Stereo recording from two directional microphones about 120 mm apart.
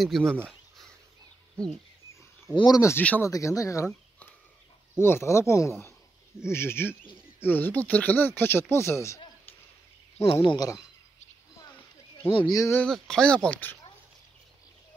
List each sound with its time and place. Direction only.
0.0 s speech: 5° left (ahead or behind)
0.5 s a sound: 5° left (ahead or behind)
2.5 s speech: 35° left (ahead or behind)
3.0 s speech: 10° left (ahead or behind)
3.3 s speech: 30° left (ahead or behind)
4.9 s speech: 20° left (ahead or behind)
10.1 s speech: 50° left (ahead or behind)
10.5 s speech: 30° left (ahead or behind)
12.4 s speech: 30° left (ahead or behind)
12.8 s speech: 5° left (ahead or behind)